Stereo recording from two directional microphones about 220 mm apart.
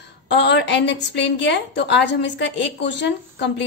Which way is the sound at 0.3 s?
50° left (ahead or behind).